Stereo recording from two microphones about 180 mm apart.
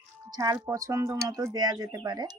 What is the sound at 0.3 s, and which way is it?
Speech, 20° right (ahead or behind).